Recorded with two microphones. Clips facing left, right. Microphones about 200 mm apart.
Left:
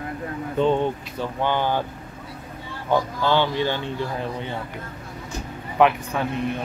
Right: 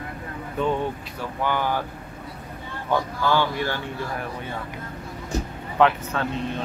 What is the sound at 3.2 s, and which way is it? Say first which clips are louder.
Speech: left 1 dB; 25° left (ahead or behind).